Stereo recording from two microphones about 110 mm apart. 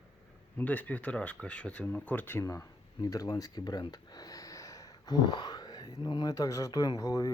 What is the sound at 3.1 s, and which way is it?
Speech, 35° left (ahead or behind).